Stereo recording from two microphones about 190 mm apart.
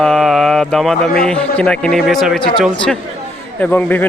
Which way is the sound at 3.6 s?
10° left (ahead or behind).